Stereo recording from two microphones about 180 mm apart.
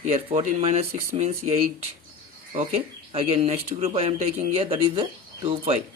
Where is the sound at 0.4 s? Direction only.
35° right (ahead or behind).